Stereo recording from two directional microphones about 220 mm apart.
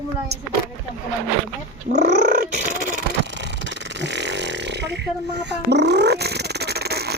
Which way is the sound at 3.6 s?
50° right (ahead or behind).